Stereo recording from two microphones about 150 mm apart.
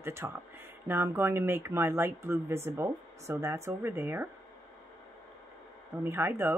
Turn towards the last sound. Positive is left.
turn(degrees=-15)  # may be behind; listen again after turning